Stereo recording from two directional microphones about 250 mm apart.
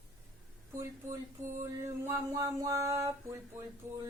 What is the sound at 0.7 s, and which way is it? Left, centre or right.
Speech, centre.